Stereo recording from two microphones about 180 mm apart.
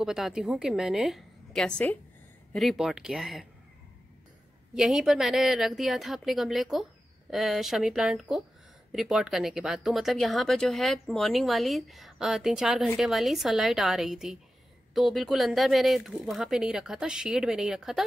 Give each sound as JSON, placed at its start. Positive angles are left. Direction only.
{"t": 0.0, "sound": "speech", "side_deg": -5}
{"t": 4.7, "sound": "speech", "side_deg": 0}